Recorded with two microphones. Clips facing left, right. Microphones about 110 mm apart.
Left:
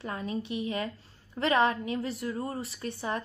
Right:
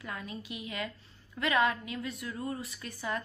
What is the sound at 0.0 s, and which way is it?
A woman's voice, 30° left (ahead or behind).